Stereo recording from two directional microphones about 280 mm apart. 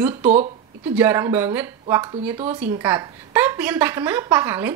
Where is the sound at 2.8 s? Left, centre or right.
Centre.